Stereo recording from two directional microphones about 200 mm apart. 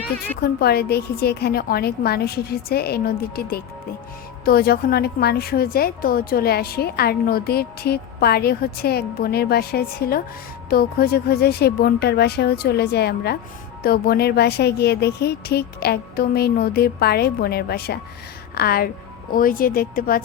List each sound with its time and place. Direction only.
0.4 s a woman's voice: 50° left (ahead or behind)